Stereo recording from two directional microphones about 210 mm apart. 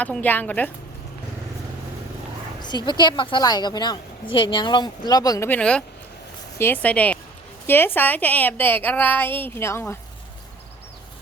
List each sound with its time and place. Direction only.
0.0 s a woman's voice: 5° left (ahead or behind)
2.6 s a woman's voice: 20° left (ahead or behind)